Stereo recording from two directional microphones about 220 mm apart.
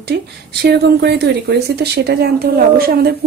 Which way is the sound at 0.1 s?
50° right (ahead or behind).